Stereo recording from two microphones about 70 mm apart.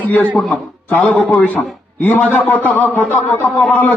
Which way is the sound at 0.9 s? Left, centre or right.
Left.